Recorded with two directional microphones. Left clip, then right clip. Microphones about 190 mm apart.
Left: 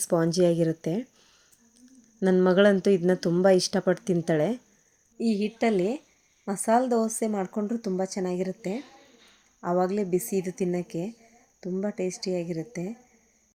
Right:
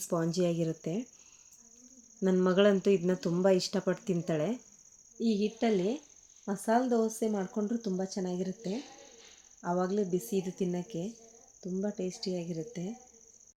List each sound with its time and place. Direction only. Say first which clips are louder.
0.0 s speech: left 8 dB; 40° left (ahead or behind)
2.2 s speech: left 6 dB; 40° left (ahead or behind)